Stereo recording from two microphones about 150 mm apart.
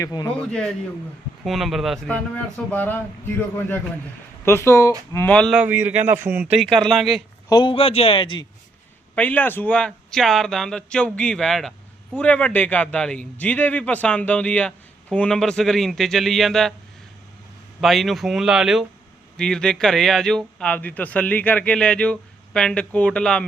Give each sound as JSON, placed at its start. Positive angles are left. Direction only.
{"t": 0.0, "sound": "speech", "side_deg": 25}
{"t": 0.3, "sound": "speech", "side_deg": 5}
{"t": 5.5, "sound": "speech", "side_deg": -15}
{"t": 6.6, "sound": "speech", "side_deg": 0}
{"t": 7.5, "sound": "a man's voice", "side_deg": 35}
{"t": 9.1, "sound": "speech", "side_deg": 10}
{"t": 17.7, "sound": "speech", "side_deg": 0}